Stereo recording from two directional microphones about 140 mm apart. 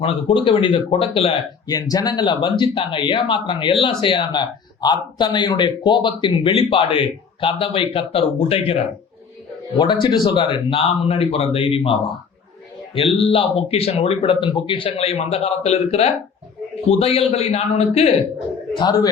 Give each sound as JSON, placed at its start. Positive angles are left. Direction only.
{"t": 0.0, "sound": "speech", "side_deg": 40}
{"t": 1.6, "sound": "speech", "side_deg": 30}
{"t": 9.7, "sound": "speech", "side_deg": 35}
{"t": 18.7, "sound": "speech", "side_deg": 30}